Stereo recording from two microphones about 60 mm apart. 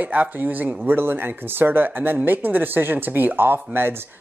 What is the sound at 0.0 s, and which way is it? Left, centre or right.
Speech, right.